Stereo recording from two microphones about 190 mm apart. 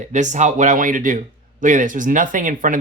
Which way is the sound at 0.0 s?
40° right (ahead or behind).